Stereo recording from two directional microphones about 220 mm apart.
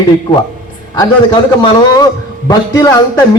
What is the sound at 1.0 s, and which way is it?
A man's voice, 20° left (ahead or behind).